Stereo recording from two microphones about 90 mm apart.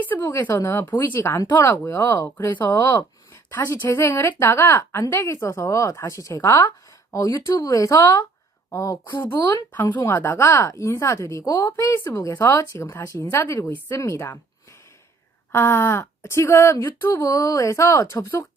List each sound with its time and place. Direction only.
0.0 s a woman's voice: 20° left (ahead or behind)
2.6 s a woman's voice: 35° left (ahead or behind)
13.7 s speech: 20° left (ahead or behind)
13.9 s a woman's voice: 35° left (ahead or behind)